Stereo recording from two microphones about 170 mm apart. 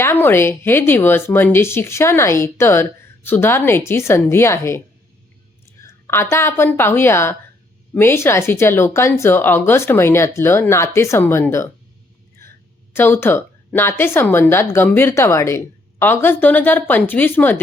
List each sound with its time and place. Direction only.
0.0 s a woman's voice: 15° left (ahead or behind)
5.8 s a woman's voice: 15° left (ahead or behind)
12.4 s a sound: 15° left (ahead or behind)
12.9 s a woman's voice: 15° left (ahead or behind)